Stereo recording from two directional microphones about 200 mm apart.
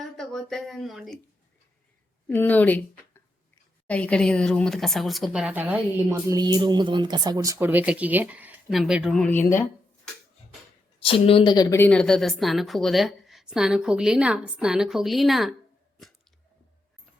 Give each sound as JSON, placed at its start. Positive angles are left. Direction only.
{"t": 0.0, "sound": "speech", "side_deg": 0}
{"t": 2.2, "sound": "speech", "side_deg": 10}
{"t": 3.8, "sound": "a woman's voice", "side_deg": 5}
{"t": 11.0, "sound": "a woman's voice", "side_deg": 25}